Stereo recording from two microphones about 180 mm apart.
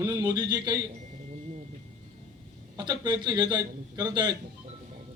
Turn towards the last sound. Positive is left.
turn(degrees=-20)  # may be behind; listen again after turning